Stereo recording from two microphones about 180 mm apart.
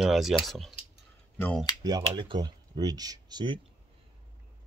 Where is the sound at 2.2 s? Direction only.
25° right (ahead or behind).